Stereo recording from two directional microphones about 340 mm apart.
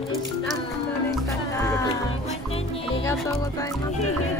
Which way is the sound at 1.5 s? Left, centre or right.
Centre.